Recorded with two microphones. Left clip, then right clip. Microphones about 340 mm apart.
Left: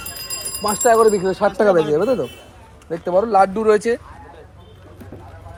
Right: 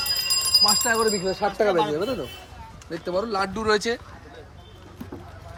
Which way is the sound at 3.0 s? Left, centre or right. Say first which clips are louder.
Left 9 dB; left.